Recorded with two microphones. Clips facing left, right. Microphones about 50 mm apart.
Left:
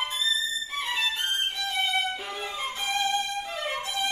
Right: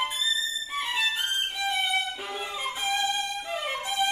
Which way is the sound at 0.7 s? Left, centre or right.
Centre.